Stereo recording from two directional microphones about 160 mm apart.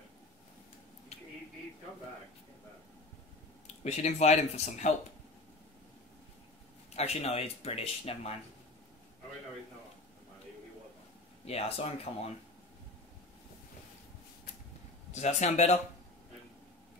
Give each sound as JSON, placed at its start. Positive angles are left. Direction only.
{"t": 3.8, "sound": "speech", "side_deg": 45}
{"t": 7.0, "sound": "speech", "side_deg": 40}
{"t": 11.4, "sound": "speech", "side_deg": 40}
{"t": 15.1, "sound": "speech", "side_deg": 45}